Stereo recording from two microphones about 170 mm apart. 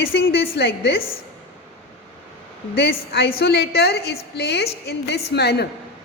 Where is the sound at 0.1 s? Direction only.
75° left (ahead or behind).